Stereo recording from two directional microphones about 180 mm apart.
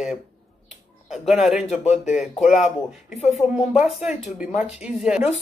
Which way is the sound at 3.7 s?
5° right (ahead or behind).